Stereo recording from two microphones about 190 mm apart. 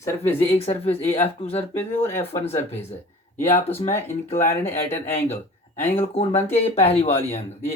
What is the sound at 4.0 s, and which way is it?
Speech, 10° left (ahead or behind).